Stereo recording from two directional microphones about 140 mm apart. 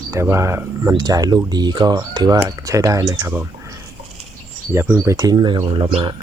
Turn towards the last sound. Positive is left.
turn(degrees=-35)  # may be behind; listen again after turning